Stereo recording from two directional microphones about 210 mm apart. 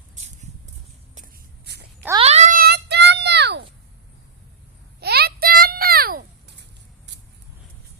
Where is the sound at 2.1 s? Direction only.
30° right (ahead or behind); by 3.6 s 55° right (ahead or behind).